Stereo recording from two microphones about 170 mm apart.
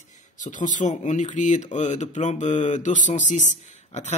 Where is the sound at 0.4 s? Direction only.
50° left (ahead or behind).